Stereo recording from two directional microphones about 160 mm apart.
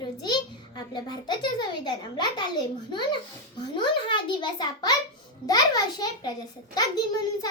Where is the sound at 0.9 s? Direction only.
25° left (ahead or behind).